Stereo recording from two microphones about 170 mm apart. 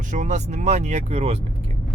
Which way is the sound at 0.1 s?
45° right (ahead or behind).